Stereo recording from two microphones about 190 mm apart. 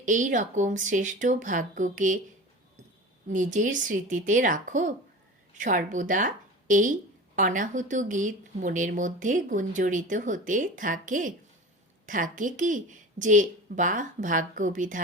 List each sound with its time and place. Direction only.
0.0 s speech: 40° right (ahead or behind)
3.2 s a woman's voice: 40° right (ahead or behind)